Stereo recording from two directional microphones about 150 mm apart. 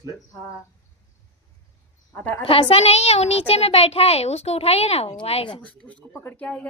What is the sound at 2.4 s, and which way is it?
A child's voice, 35° left (ahead or behind).